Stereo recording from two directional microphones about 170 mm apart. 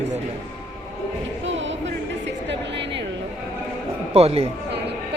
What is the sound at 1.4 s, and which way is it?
Music, 90° right.